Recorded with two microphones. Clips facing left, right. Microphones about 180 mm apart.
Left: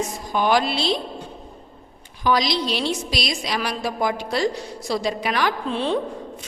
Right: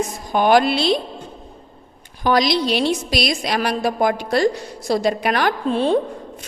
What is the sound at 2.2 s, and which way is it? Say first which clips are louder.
A woman's voice: right 4 dB; 55° right (ahead or behind).